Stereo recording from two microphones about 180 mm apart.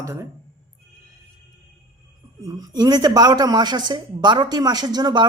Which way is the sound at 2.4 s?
20° right (ahead or behind).